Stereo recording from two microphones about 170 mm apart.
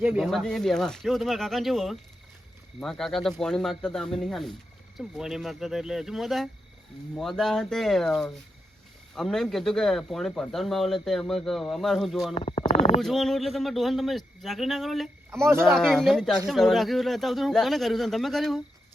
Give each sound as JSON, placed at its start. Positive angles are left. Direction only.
{"t": 0.0, "sound": "speech", "side_deg": -10}
{"t": 0.3, "sound": "speech", "side_deg": 0}
{"t": 12.3, "sound": "a sound", "side_deg": 35}
{"t": 13.0, "sound": "speech", "side_deg": 0}
{"t": 15.3, "sound": "speech", "side_deg": -15}
{"t": 15.6, "sound": "speech", "side_deg": 0}